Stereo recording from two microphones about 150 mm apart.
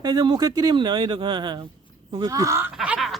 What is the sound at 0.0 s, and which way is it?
Speech, 30° right (ahead or behind).